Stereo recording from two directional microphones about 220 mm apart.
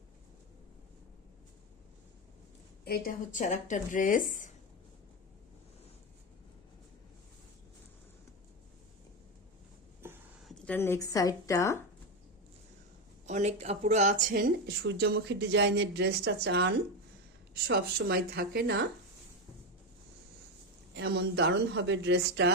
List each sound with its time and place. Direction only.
2.8 s speech: 45° left (ahead or behind)
10.5 s a woman's voice: 10° left (ahead or behind)
13.2 s speech: 30° right (ahead or behind)
20.9 s speech: 50° right (ahead or behind)